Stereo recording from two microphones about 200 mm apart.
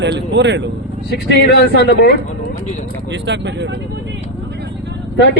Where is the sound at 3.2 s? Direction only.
60° right (ahead or behind).